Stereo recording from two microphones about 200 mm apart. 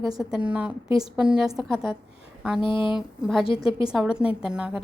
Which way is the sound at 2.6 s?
25° left (ahead or behind).